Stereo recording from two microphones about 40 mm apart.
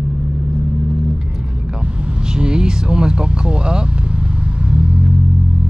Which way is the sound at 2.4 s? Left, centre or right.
Right.